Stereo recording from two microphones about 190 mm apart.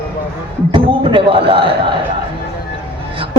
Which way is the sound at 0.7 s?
25° right (ahead or behind).